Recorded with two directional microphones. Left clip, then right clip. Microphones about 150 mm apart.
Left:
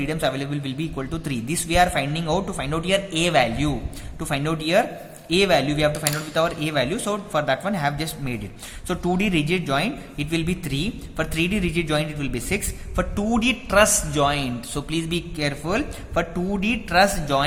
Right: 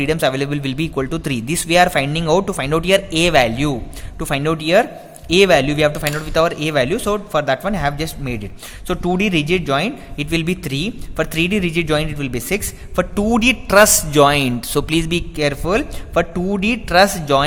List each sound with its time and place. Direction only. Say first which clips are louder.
0.0 s a man's voice: right 7 dB; 50° right (ahead or behind)